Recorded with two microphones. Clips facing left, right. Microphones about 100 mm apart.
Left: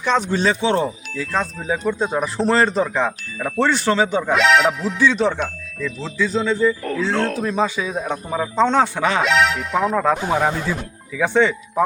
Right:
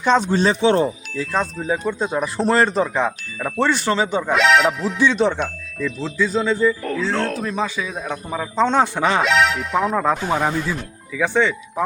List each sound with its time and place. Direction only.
0.0 s speech: 30° right (ahead or behind)
1.2 s speech: 5° right (ahead or behind)
5.0 s speech: 20° right (ahead or behind)
5.3 s speech: centre (ahead or behind)
7.6 s speech: 15° left (ahead or behind)
8.7 s speech: 15° right (ahead or behind)
9.2 s speech: centre (ahead or behind)